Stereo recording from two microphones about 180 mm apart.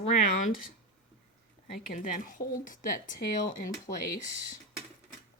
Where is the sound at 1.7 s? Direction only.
50° left (ahead or behind).